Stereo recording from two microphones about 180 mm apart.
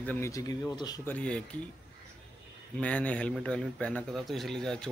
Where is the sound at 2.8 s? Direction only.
5° left (ahead or behind).